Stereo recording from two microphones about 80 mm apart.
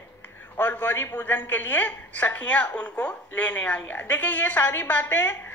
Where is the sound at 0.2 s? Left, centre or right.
Left.